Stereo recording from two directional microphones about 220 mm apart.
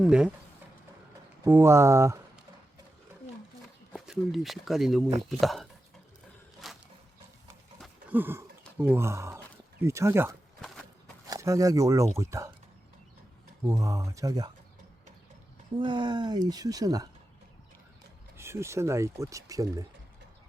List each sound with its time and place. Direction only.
0.0 s speech: 5° right (ahead or behind)
1.5 s speech: 10° right (ahead or behind)
3.9 s speech: centre (ahead or behind)
6.6 s a sound: centre (ahead or behind)
8.8 s speech: 10° right (ahead or behind)
13.7 s speech: 15° right (ahead or behind)
15.8 s speech: 20° right (ahead or behind)
18.3 s speech: 10° right (ahead or behind)